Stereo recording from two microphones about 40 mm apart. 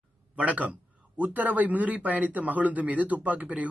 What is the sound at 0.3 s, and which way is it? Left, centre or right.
A man's voice, right.